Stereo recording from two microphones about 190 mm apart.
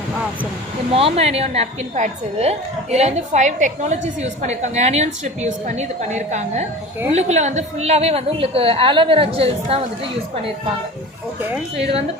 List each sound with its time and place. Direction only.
0.9 s a woman's voice: 30° right (ahead or behind)